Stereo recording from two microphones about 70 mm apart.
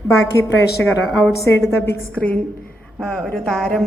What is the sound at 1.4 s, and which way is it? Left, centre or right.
Speech, left.